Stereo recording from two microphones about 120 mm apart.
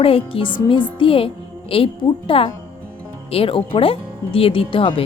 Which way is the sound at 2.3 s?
50° left (ahead or behind).